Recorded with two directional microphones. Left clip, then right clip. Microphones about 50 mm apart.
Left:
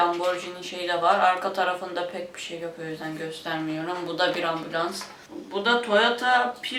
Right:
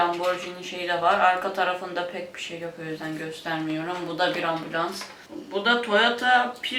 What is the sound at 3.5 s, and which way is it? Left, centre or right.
Speech, centre.